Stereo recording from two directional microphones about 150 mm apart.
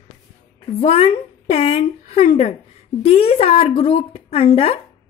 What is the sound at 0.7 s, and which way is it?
Speech, 40° left (ahead or behind).